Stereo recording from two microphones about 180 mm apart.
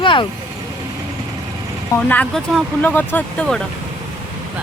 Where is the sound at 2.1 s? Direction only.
5° left (ahead or behind).